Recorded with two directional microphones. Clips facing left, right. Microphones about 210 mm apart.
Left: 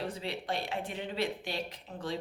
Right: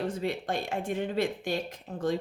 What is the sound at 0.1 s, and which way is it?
Speech, 50° right (ahead or behind).